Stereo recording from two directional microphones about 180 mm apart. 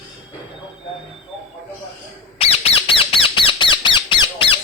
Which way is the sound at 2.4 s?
35° left (ahead or behind).